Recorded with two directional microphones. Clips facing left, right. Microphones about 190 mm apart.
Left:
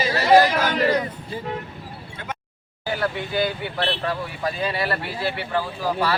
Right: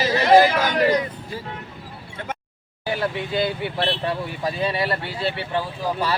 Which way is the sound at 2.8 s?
20° right (ahead or behind).